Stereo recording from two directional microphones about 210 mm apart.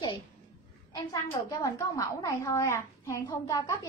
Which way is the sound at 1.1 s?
15° left (ahead or behind).